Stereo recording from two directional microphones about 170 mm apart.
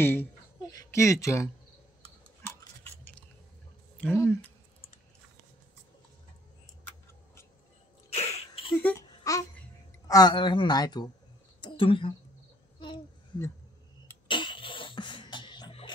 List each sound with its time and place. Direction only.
0.0 s a sound: 15° left (ahead or behind)
2.2 s tick-tock: 15° left (ahead or behind)
4.0 s speech: 10° left (ahead or behind)
8.1 s a sound: 40° left (ahead or behind)
8.7 s a child's voice: 10° left (ahead or behind)
9.2 s babbling: 20° left (ahead or behind)
10.0 s a woman's voice: 20° left (ahead or behind)
11.6 s a sound: 30° left (ahead or behind)
14.2 s beatboxing: 30° left (ahead or behind)